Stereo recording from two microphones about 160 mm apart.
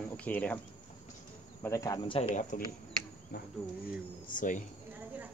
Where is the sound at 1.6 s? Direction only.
20° left (ahead or behind).